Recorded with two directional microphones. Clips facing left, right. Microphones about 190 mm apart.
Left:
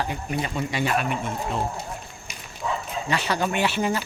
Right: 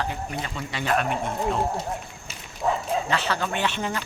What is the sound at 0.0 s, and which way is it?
Speech, 15° left (ahead or behind).